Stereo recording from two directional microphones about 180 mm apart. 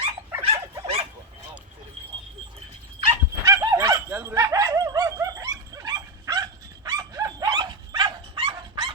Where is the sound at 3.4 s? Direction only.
15° right (ahead or behind).